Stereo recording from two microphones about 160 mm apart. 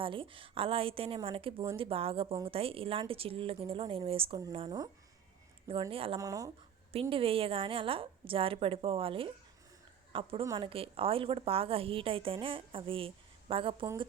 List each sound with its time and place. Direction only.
0.0 s a woman's voice: 35° right (ahead or behind)
5.9 s a woman's voice: 35° right (ahead or behind)
6.1 s speech: 20° right (ahead or behind)
6.9 s a woman's voice: 35° right (ahead or behind)
10.4 s speech: 25° right (ahead or behind)
10.7 s a woman's voice: 35° right (ahead or behind)